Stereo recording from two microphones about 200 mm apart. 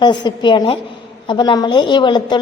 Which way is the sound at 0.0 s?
20° left (ahead or behind).